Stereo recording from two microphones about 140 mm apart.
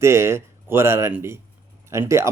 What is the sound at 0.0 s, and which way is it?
A man's voice, 20° right (ahead or behind).